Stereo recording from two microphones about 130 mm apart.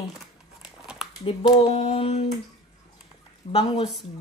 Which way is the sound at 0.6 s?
5° right (ahead or behind).